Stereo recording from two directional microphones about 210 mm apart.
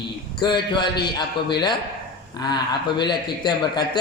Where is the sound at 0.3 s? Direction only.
20° left (ahead or behind).